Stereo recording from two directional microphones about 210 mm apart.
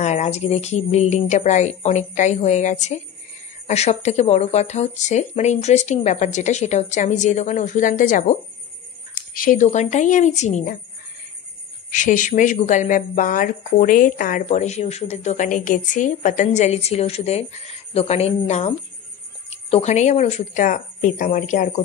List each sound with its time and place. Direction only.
0.0 s speech: 35° left (ahead or behind)
11.9 s speech: 35° left (ahead or behind)